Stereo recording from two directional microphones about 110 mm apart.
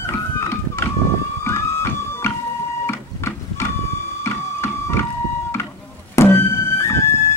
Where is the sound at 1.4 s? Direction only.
25° left (ahead or behind).